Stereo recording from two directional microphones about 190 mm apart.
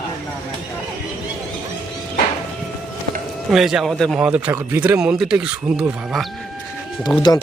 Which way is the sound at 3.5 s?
Centre (ahead or behind).